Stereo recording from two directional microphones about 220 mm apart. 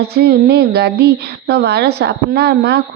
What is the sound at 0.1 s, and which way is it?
A woman's voice, 45° right (ahead or behind).